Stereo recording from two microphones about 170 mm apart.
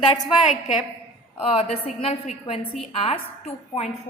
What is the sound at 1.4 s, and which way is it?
A woman's voice, 35° left (ahead or behind).